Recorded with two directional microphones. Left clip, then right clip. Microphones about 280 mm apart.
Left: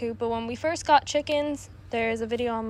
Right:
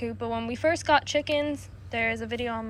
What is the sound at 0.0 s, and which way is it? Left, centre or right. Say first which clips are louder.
A woman's voice: left 3 dB; centre.